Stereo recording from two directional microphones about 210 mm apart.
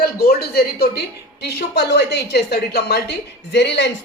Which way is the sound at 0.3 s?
50° left (ahead or behind).